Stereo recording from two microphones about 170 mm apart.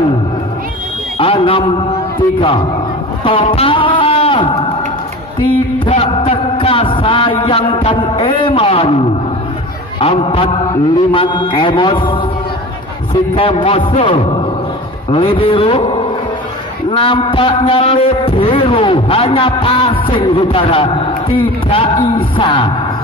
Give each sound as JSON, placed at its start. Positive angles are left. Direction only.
{"t": 1.1, "sound": "a sound", "side_deg": 35}
{"t": 3.3, "sound": "music", "side_deg": 35}
{"t": 5.9, "sound": "music", "side_deg": 30}
{"t": 9.9, "sound": "a man's voice", "side_deg": 35}
{"t": 16.9, "sound": "a man's voice", "side_deg": 30}